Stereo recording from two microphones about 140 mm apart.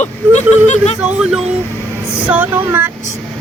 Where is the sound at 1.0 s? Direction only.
10° right (ahead or behind).